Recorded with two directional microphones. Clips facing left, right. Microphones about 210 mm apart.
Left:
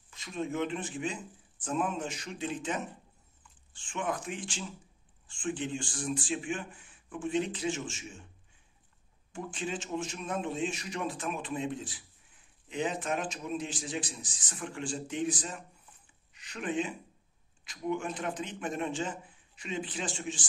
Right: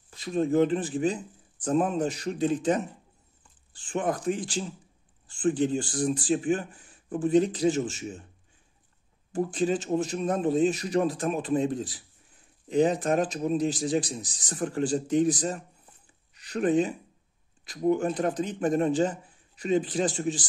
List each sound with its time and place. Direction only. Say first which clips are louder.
0.1 s a man's voice: right 10 dB; 35° right (ahead or behind)
9.3 s a man's voice: right 11 dB; 40° right (ahead or behind)